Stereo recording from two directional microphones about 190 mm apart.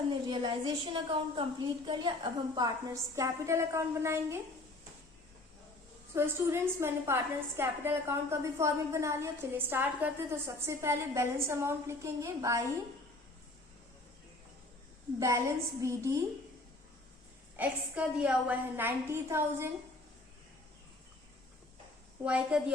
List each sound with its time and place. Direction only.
0.1 s a woman's voice: 25° right (ahead or behind)
6.1 s a woman's voice: 15° right (ahead or behind)
15.8 s a woman's voice: 15° right (ahead or behind)
17.6 s a woman's voice: 5° right (ahead or behind)
22.2 s a woman's voice: 5° right (ahead or behind)